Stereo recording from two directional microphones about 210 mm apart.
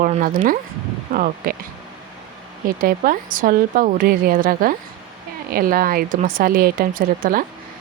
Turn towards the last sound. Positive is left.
turn(degrees=-40)  # may be behind; listen again after turning